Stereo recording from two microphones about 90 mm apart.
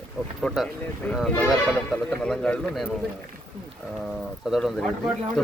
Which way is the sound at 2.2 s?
10° left (ahead or behind).